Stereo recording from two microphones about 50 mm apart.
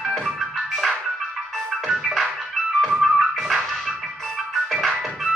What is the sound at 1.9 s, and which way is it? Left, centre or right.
Music, centre.